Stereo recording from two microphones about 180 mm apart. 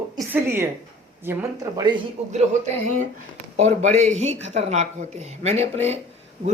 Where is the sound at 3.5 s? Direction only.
40° right (ahead or behind).